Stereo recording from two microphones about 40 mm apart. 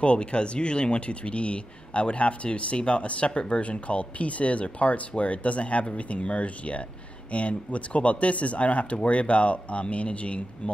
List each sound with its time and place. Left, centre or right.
0.0 s speech: left